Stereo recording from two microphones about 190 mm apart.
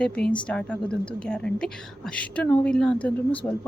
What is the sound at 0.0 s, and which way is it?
A woman's voice, 5° left (ahead or behind).